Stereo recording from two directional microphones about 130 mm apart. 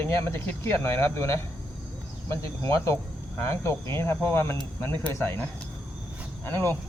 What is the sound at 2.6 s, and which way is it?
Cricket, 20° left (ahead or behind).